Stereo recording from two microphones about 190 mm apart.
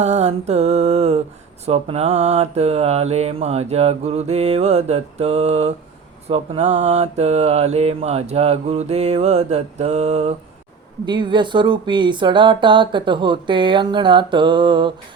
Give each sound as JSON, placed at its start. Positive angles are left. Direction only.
{"t": 0.0, "sound": "mantra", "side_deg": -35}
{"t": 11.0, "sound": "speech", "side_deg": -25}